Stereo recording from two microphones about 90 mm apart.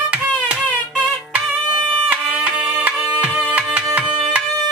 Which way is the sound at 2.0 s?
15° right (ahead or behind).